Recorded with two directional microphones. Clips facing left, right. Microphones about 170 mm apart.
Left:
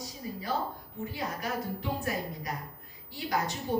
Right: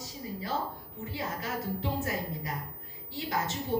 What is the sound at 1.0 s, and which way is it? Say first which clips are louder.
A woman's voice: left 1 dB; 25° right (ahead or behind).